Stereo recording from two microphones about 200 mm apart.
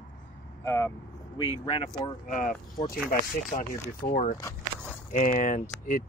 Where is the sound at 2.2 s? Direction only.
45° left (ahead or behind).